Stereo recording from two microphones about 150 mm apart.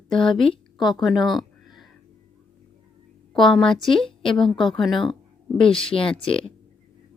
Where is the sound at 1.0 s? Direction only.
Centre (ahead or behind).